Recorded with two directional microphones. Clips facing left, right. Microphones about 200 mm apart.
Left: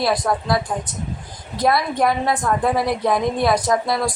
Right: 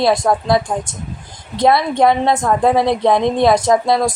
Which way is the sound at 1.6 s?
25° right (ahead or behind).